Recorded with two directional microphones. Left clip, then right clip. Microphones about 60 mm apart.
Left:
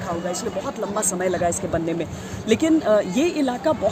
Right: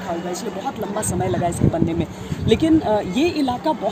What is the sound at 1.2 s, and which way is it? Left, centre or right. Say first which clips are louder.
Speech: right 1 dB; left.